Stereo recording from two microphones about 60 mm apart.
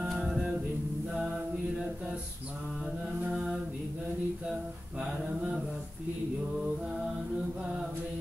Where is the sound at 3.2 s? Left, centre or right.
Centre.